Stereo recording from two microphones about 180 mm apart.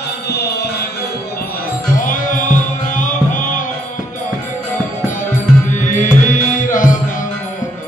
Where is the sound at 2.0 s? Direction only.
45° left (ahead or behind).